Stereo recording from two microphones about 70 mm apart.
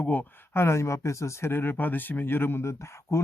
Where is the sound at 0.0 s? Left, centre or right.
Left.